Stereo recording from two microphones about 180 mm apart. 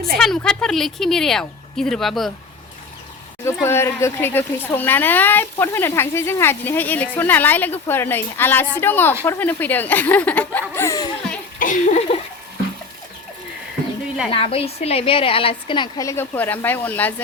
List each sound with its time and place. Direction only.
0.2 s speech: 5° left (ahead or behind)
3.4 s speech: 15° left (ahead or behind)
11.6 s a sound: 45° left (ahead or behind)
14.3 s a woman's voice: 30° left (ahead or behind); by 17.2 s 10° left (ahead or behind)